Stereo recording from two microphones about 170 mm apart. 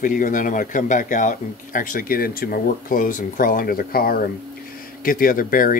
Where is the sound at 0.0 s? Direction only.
50° left (ahead or behind).